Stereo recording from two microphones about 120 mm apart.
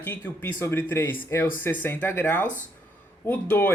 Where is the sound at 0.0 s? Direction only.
15° left (ahead or behind).